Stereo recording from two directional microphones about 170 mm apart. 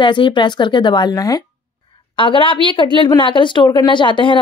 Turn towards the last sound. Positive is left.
turn(degrees=30)  # may be behind; listen again after turning